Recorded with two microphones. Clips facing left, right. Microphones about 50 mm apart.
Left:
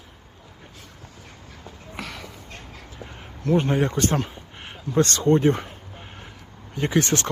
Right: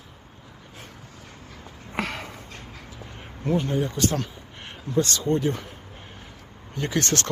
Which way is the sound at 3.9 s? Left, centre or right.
Left.